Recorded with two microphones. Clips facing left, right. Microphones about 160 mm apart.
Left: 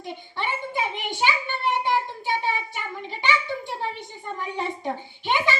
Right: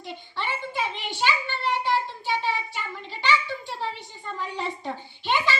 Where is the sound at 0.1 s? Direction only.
15° left (ahead or behind).